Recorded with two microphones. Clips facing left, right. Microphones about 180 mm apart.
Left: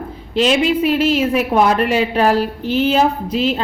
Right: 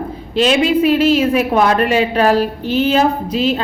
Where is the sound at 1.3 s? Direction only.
10° left (ahead or behind).